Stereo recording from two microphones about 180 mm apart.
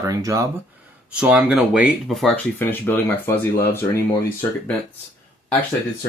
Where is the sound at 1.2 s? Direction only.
5° right (ahead or behind); by 3.8 s 10° left (ahead or behind).